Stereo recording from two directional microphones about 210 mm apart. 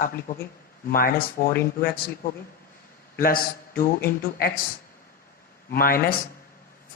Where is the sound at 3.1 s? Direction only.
45° left (ahead or behind).